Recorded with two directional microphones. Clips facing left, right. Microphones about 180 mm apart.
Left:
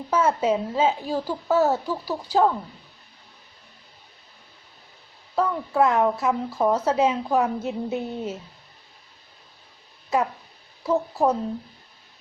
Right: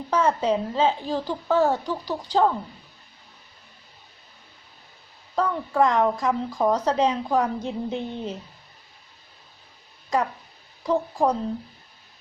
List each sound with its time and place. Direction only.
0.1 s speech: 5° left (ahead or behind)
5.3 s speech: 5° left (ahead or behind)
10.1 s speech: 5° left (ahead or behind)